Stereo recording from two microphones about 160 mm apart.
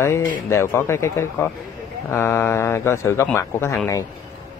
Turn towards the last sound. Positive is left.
turn(degrees=15)  # may be behind; listen again after turning